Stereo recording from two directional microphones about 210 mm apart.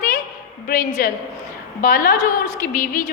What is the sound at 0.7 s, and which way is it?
A woman's voice, 45° left (ahead or behind).